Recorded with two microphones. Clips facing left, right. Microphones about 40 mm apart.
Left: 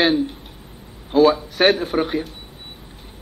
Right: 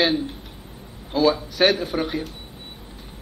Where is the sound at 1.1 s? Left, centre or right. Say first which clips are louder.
Left 5 dB; left.